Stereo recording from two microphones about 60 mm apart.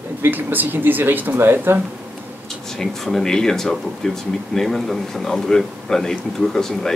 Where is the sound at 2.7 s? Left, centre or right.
Centre.